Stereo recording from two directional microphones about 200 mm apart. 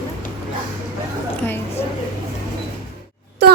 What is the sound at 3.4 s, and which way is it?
Music, 55° right (ahead or behind).